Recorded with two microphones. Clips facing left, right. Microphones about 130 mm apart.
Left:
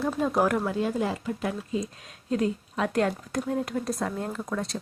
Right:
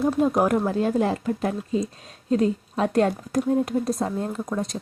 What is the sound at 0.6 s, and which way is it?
Speech, 40° right (ahead or behind).